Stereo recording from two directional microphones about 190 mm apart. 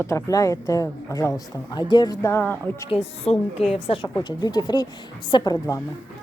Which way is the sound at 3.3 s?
30° left (ahead or behind).